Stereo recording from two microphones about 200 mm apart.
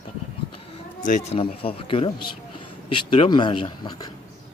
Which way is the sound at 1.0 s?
35° left (ahead or behind).